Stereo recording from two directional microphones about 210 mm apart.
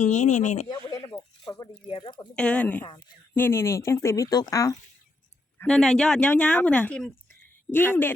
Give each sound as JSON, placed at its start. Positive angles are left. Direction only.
{"t": 0.0, "sound": "speech", "side_deg": 35}
{"t": 0.7, "sound": "a sound", "side_deg": 20}
{"t": 1.9, "sound": "speech", "side_deg": 20}
{"t": 2.3, "sound": "a woman's voice", "side_deg": 5}
{"t": 5.5, "sound": "a woman's voice", "side_deg": 5}